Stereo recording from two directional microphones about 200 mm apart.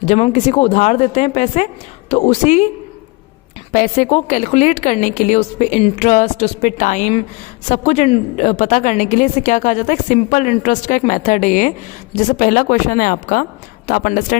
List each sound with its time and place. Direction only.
0.0 s speech: 35° left (ahead or behind)
3.7 s speech: 40° left (ahead or behind)